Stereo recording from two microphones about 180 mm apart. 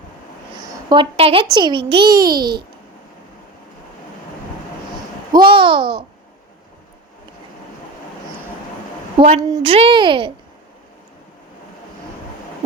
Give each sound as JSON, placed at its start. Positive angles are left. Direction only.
{"t": 0.6, "sound": "a child's voice", "side_deg": -20}
{"t": 5.3, "sound": "a child's voice", "side_deg": -25}
{"t": 9.2, "sound": "a child's voice", "side_deg": -25}